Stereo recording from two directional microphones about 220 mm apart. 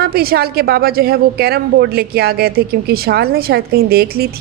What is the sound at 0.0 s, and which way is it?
A woman's voice, 45° right (ahead or behind).